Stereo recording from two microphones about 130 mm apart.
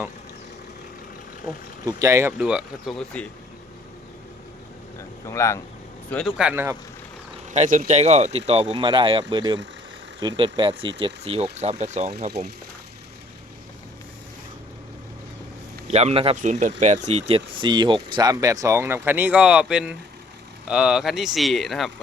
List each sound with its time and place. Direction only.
1.9 s speech: 25° right (ahead or behind)
2.4 s speech: 5° right (ahead or behind)
2.9 s speech: 5° left (ahead or behind)
5.2 s speech: 20° left (ahead or behind)
6.2 s speech: 5° right (ahead or behind)
6.5 s speech: 15° right (ahead or behind)
7.5 s speech: 65° right (ahead or behind)
8.8 s speech: 40° right (ahead or behind); by 12.5 s 60° right (ahead or behind)
15.9 s speech: 55° right (ahead or behind)
16.4 s speech: 70° right (ahead or behind); by 21.9 s centre (ahead or behind)